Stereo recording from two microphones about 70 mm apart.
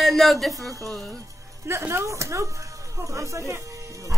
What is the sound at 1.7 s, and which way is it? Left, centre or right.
Speech, right.